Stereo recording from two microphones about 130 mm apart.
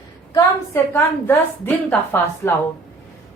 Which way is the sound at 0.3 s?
20° left (ahead or behind).